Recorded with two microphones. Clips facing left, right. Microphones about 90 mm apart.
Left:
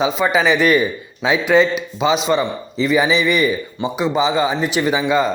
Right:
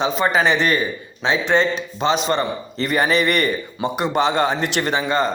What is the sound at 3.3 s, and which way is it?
Speech, centre (ahead or behind).